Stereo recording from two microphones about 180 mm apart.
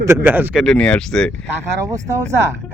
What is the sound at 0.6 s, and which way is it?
Speech, 5° left (ahead or behind).